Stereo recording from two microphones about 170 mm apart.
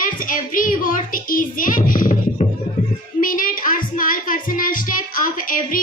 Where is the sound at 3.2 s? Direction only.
55° left (ahead or behind).